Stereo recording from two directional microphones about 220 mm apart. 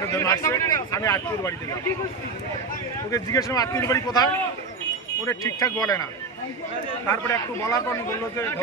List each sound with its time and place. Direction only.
0.0 s a man's voice: 15° left (ahead or behind)
3.1 s a man's voice: 15° left (ahead or behind)
7.1 s a man's voice: 15° left (ahead or behind)